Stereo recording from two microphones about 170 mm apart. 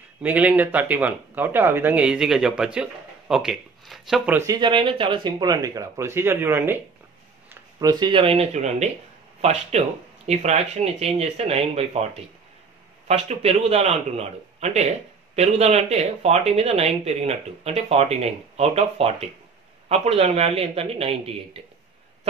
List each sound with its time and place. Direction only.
0.2 s speech: 10° right (ahead or behind)
4.4 s speech: 25° right (ahead or behind)
7.8 s speech: 25° right (ahead or behind)